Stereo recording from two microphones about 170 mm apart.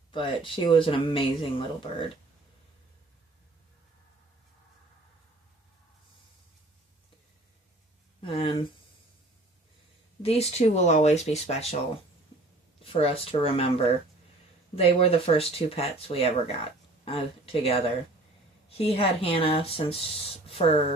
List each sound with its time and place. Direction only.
0.1 s speech: 30° left (ahead or behind)
8.2 s speech: 30° left (ahead or behind)
10.2 s speech: 35° left (ahead or behind)
12.8 s speech: 35° left (ahead or behind)
14.8 s speech: 35° left (ahead or behind)